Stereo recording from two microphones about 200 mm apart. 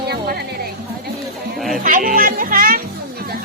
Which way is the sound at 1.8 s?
40° right (ahead or behind).